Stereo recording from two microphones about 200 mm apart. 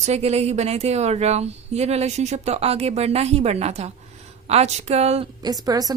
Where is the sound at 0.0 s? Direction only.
35° right (ahead or behind).